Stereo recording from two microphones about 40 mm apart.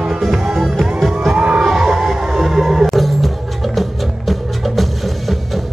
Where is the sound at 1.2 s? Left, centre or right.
Right.